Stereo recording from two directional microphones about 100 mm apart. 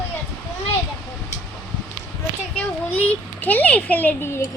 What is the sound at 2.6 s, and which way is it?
A child's voice, 15° left (ahead or behind).